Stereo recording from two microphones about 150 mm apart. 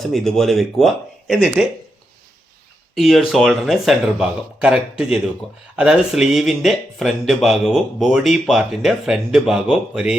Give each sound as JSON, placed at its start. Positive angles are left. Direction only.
{"t": 0.0, "sound": "speech", "side_deg": 0}
{"t": 2.9, "sound": "speech", "side_deg": 0}